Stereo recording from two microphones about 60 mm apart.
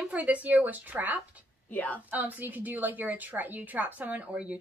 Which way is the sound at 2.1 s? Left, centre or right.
Right.